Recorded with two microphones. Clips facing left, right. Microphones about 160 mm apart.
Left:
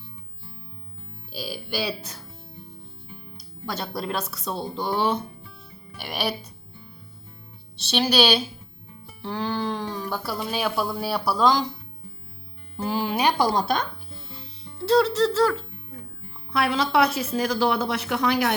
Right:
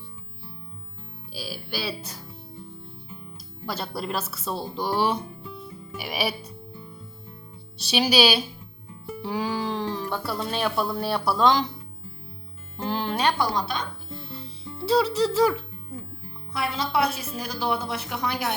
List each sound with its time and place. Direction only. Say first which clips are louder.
1.3 s speech: left 3 dB; centre (ahead or behind)
3.3 s speech: left 1 dB; 5° right (ahead or behind)
7.9 s speech: even; 10° right (ahead or behind)
12.7 s music: left 2 dB; 5° left (ahead or behind)
13.4 s speech: left 4 dB; 35° left (ahead or behind)
14.8 s speech: left 2 dB; 10° right (ahead or behind)
16.5 s speech: left 5 dB; 80° left